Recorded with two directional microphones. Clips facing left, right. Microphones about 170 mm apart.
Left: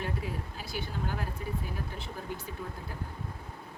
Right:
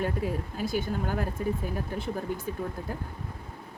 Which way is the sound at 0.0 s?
50° right (ahead or behind).